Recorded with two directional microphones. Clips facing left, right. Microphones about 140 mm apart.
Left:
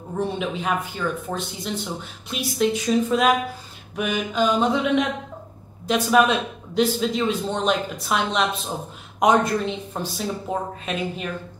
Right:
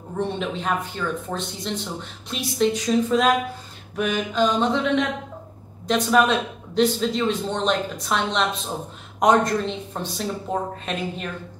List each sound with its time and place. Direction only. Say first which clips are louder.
0.2 s speech: even; 5° left (ahead or behind)
3.9 s mantra: right 1 dB; 5° left (ahead or behind)
5.9 s speech: left 1 dB; 5° left (ahead or behind)